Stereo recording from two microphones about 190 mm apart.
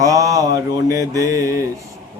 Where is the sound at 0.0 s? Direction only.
20° right (ahead or behind).